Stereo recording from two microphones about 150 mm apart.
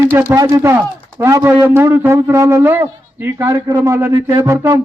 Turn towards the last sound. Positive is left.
turn(degrees=-15)  # may be behind; listen again after turning